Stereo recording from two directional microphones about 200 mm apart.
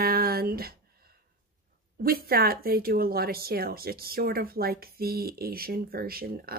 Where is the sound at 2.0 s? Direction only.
50° right (ahead or behind).